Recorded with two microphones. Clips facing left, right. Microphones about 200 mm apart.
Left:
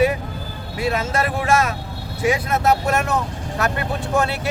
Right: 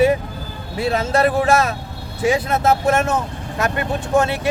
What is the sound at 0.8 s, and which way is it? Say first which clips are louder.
Speech: right 2 dB; 30° right (ahead or behind).